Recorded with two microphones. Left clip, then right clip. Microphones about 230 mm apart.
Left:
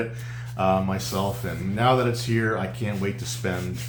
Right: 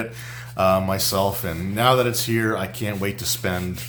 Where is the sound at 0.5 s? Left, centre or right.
Right.